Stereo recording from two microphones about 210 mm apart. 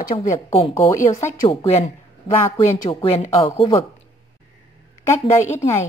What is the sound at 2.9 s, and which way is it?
Speech, 25° left (ahead or behind).